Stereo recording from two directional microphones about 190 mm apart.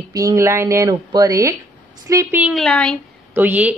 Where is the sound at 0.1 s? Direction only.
20° right (ahead or behind).